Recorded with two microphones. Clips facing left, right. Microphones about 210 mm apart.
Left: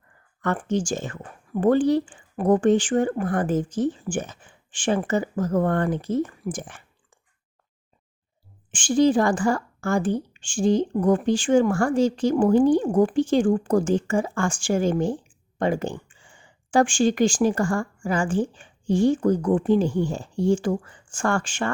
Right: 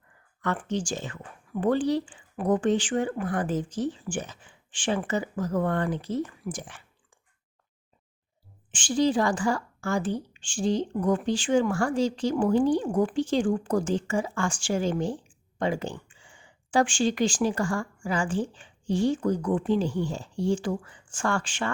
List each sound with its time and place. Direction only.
0.4 s a woman's voice: 50° left (ahead or behind)
8.7 s a woman's voice: 50° left (ahead or behind)